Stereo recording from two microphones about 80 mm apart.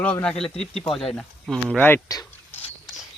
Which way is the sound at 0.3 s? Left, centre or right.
Centre.